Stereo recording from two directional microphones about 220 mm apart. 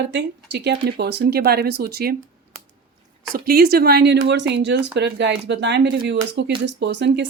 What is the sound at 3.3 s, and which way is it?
Speech, 45° right (ahead or behind).